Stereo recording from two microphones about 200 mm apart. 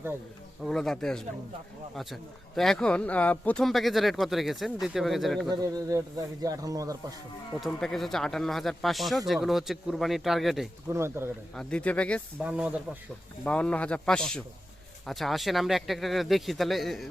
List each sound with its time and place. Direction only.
0.6 s speech: centre (ahead or behind)
2.6 s speech: centre (ahead or behind)
5.5 s speech: 20° right (ahead or behind)
7.6 s speech: centre (ahead or behind)
10.8 s speech: 15° right (ahead or behind)
11.5 s speech: 5° left (ahead or behind)
12.4 s speech: 5° right (ahead or behind)
13.4 s speech: 5° left (ahead or behind)